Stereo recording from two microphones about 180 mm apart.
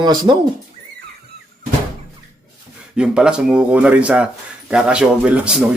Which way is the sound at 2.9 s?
5° right (ahead or behind).